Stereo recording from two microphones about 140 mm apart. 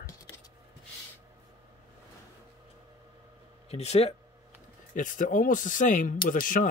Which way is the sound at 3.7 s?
50° left (ahead or behind).